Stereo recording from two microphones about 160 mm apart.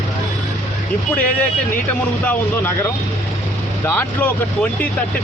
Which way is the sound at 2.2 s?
10° left (ahead or behind).